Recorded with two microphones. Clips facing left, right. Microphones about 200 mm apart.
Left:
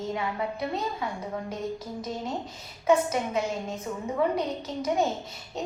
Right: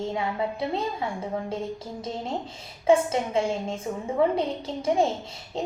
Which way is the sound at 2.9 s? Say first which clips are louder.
Right 2 dB; 30° right (ahead or behind).